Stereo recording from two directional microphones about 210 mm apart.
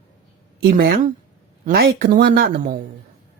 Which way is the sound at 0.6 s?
50° right (ahead or behind).